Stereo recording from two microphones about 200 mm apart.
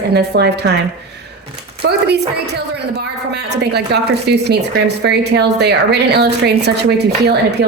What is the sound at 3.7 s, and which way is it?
A woman's voice, 55° right (ahead or behind).